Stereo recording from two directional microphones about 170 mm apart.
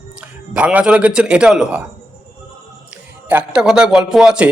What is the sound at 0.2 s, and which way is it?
A man's voice, 5° right (ahead or behind).